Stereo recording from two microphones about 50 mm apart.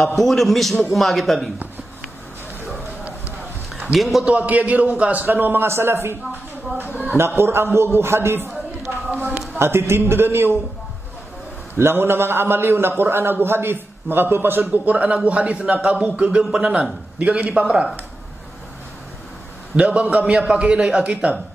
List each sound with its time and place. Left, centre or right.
0.0 s a man's voice: centre
3.8 s a man's voice: centre
4.3 s a man's voice: right
5.7 s a man's voice: right
7.2 s a man's voice: right
9.1 s a sound: right
9.6 s a man's voice: right
11.7 s a man's voice: right
14.9 s a man's voice: right
16.4 s a man's voice: centre
17.2 s a man's voice: right
19.8 s a man's voice: right